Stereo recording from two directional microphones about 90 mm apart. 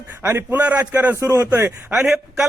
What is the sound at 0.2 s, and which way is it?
A man's voice, 25° right (ahead or behind).